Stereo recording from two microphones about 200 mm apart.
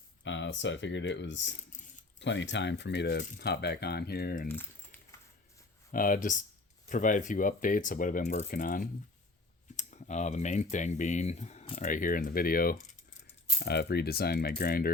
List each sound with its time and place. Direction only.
0.3 s speech: 65° left (ahead or behind); by 4.4 s 50° left (ahead or behind)
4.4 s typing: 10° left (ahead or behind)
5.9 s speech: 45° left (ahead or behind)
11.9 s speech: 40° left (ahead or behind)